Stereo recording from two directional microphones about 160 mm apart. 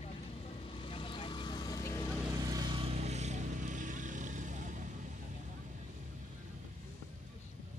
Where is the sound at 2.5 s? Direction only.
25° right (ahead or behind); by 4.9 s 50° right (ahead or behind).